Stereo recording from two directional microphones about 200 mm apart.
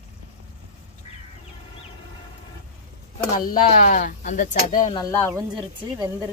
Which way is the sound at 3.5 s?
40° left (ahead or behind).